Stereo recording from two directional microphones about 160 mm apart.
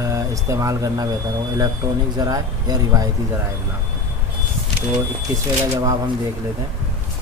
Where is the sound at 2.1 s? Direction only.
20° right (ahead or behind).